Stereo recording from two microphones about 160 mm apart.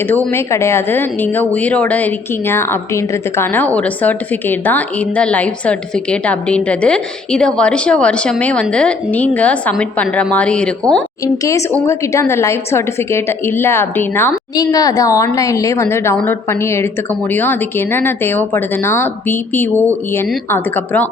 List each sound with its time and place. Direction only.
0.3 s a woman's voice: 15° left (ahead or behind)
11.7 s a woman's voice: 15° left (ahead or behind)
14.5 s a woman's voice: 25° left (ahead or behind)